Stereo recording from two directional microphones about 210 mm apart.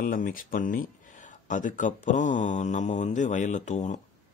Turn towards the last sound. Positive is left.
turn(degrees=35)  # may be behind; listen again after turning